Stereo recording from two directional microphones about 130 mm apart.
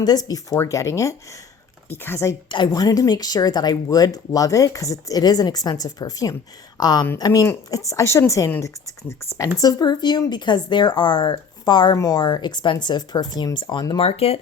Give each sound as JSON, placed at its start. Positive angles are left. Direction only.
{"t": 0.0, "sound": "speech", "side_deg": 30}
{"t": 2.5, "sound": "speech", "side_deg": 35}
{"t": 9.6, "sound": "speech", "side_deg": 30}
{"t": 14.0, "sound": "speech", "side_deg": 50}